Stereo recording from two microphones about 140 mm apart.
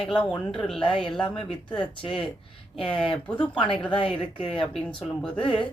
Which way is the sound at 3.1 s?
10° left (ahead or behind).